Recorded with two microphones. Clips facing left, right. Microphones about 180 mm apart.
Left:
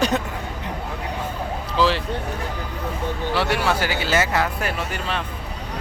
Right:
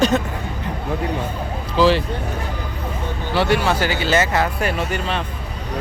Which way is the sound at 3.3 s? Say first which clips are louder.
Right 4 dB; 5° left (ahead or behind).